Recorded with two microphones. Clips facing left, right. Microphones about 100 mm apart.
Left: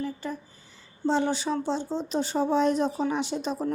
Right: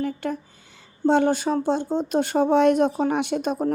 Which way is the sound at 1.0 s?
55° right (ahead or behind).